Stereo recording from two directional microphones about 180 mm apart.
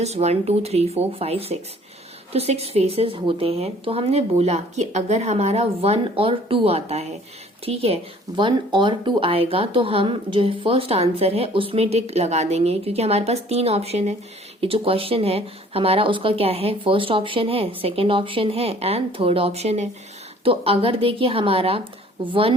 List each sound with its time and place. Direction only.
0.0 s speech: 35° right (ahead or behind)